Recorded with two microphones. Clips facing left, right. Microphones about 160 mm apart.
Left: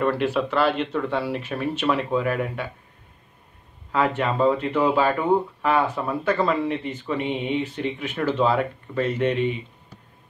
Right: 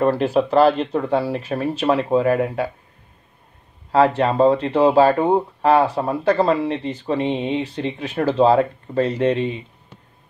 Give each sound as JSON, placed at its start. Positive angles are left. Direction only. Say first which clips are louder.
{"t": 0.0, "sound": "speech", "louder": "right 5 dB", "side_deg": -40}
{"t": 3.9, "sound": "speech", "louder": "right 6 dB", "side_deg": -35}